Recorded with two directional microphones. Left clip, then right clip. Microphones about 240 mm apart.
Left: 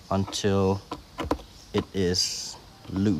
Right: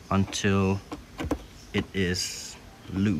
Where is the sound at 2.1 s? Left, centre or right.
Left.